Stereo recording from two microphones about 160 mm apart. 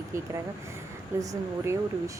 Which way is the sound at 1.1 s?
15° right (ahead or behind).